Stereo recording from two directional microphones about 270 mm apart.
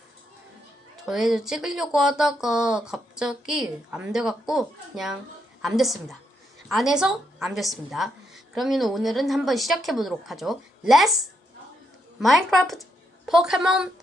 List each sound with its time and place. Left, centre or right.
1.0 s speech: centre
12.2 s a woman's voice: centre